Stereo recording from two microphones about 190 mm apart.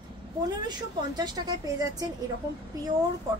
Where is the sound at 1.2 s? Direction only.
20° right (ahead or behind).